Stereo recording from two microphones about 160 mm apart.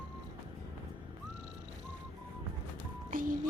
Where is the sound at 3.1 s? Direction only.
60° right (ahead or behind).